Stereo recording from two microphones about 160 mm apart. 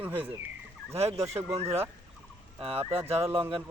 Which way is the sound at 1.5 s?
40° right (ahead or behind).